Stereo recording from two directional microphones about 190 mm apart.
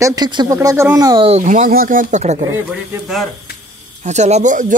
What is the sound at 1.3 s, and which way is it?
Speech, 40° right (ahead or behind).